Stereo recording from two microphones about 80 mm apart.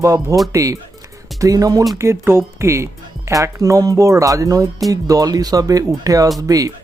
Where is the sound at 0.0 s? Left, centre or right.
Right.